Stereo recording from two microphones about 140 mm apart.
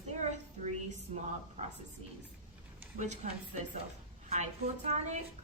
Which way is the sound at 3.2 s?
60° right (ahead or behind).